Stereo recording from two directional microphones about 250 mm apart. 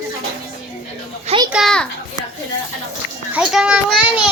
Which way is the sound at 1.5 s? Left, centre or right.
Centre.